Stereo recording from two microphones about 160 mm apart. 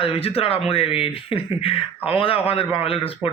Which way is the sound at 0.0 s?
35° left (ahead or behind).